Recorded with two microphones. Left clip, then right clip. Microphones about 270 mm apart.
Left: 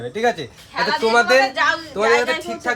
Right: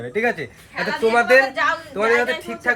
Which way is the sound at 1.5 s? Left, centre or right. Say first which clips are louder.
Left 2 dB; left.